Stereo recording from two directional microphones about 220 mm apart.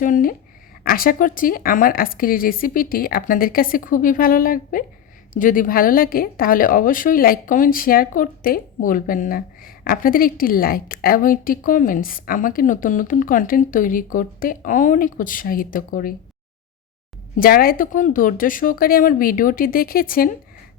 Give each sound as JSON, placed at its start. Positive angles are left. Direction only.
{"t": 0.0, "sound": "a woman's voice", "side_deg": 40}
{"t": 17.3, "sound": "a woman's voice", "side_deg": 40}